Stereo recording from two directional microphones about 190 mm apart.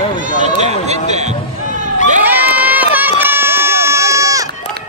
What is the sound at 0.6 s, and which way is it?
Basketball bounce, 35° right (ahead or behind).